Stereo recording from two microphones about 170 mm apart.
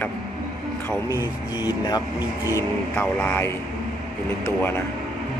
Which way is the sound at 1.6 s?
25° left (ahead or behind).